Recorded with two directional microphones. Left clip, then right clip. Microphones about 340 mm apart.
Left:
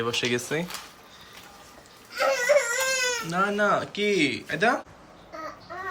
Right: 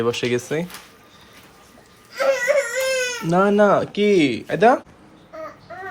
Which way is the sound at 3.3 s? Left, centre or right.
Centre.